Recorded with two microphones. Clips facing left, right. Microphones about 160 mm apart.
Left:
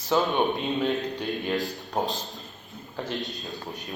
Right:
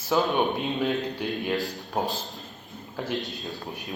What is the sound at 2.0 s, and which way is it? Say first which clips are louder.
Speech: even; 5° right (ahead or behind).